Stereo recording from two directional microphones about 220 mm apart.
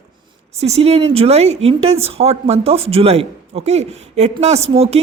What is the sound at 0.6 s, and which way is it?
A woman's voice, 30° right (ahead or behind).